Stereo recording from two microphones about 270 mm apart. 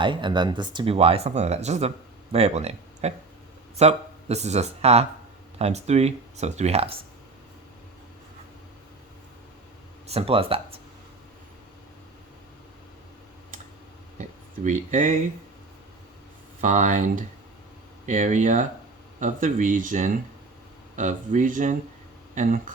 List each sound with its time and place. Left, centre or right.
0.0 s speech: centre
10.1 s speech: right
14.2 s speech: right
16.6 s speech: right